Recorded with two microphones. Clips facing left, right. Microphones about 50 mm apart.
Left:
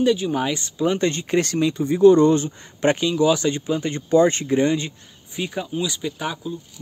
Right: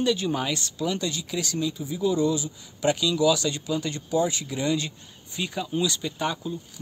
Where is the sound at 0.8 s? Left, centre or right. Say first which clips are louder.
Left 9 dB; left.